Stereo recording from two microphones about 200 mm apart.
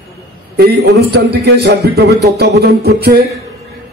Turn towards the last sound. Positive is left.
turn(degrees=-50)  # may be behind; listen again after turning